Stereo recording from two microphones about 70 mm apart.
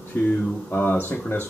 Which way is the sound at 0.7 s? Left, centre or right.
Left.